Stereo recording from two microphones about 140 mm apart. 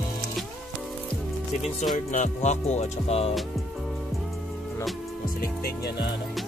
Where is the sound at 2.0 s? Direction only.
60° left (ahead or behind); by 3.3 s 45° left (ahead or behind).